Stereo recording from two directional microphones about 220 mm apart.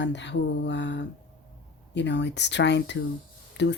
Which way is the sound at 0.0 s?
50° left (ahead or behind).